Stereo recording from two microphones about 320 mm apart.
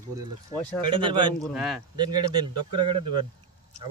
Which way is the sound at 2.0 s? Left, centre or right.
Centre.